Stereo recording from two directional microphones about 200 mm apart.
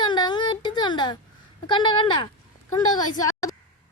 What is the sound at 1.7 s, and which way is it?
Speech, 25° left (ahead or behind).